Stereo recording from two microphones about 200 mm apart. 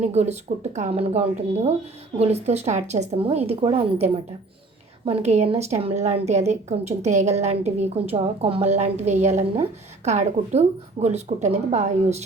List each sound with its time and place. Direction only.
0.0 s a woman's voice: 35° right (ahead or behind)